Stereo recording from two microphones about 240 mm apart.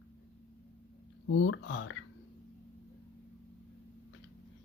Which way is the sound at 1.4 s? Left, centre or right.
Left.